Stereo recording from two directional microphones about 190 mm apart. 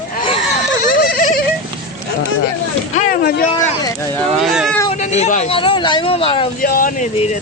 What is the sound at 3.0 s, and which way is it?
Speech, 50° left (ahead or behind).